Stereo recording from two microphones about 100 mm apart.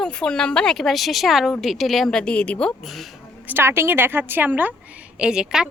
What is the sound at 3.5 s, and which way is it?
A woman's voice, 25° right (ahead or behind).